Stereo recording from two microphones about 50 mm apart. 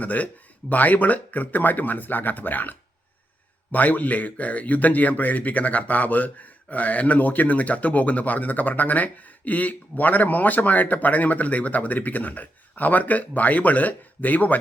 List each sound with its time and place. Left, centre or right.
0.0 s speech: left